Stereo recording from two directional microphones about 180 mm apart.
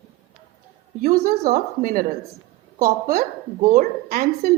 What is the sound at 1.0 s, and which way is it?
A woman's voice, 50° right (ahead or behind).